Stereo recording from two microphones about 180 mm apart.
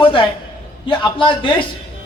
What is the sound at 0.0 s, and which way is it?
A man's voice, 30° left (ahead or behind).